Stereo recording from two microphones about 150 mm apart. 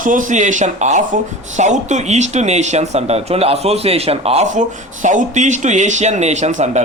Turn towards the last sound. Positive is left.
turn(degrees=-50)  # may be behind; listen again after turning